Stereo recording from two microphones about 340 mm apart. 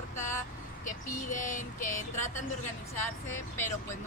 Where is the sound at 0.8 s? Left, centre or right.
Left.